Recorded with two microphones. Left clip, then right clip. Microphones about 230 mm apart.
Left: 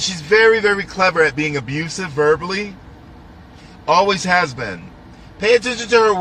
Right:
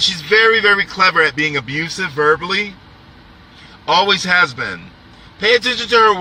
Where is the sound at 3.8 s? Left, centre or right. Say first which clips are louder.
Right 1 dB; centre.